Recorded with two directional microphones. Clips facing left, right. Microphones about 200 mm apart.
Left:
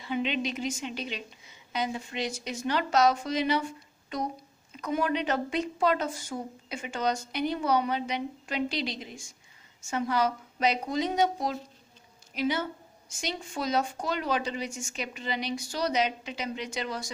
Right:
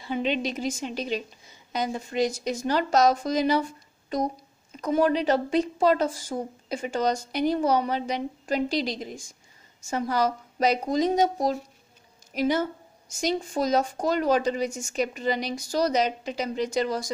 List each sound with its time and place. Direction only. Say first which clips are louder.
0.0 s a woman's voice: right 3 dB; 40° right (ahead or behind)
4.7 s a woman's voice: right 6 dB; 35° right (ahead or behind)